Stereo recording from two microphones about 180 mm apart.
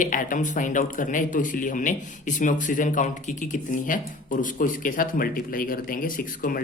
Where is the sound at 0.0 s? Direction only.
45° left (ahead or behind).